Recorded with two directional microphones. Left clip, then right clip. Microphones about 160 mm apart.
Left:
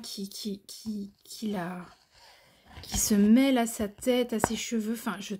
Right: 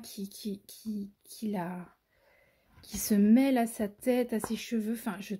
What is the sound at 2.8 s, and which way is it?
Speech, 5° right (ahead or behind).